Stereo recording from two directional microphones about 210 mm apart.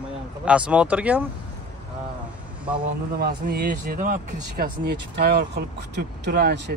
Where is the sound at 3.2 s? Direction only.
45° right (ahead or behind).